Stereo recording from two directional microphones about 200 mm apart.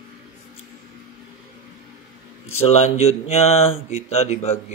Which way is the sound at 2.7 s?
30° left (ahead or behind).